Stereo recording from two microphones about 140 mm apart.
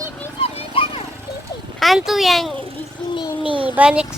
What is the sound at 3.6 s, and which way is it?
Speech, 10° right (ahead or behind).